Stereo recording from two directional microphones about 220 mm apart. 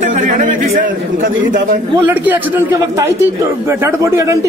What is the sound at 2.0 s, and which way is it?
Speech, 10° right (ahead or behind).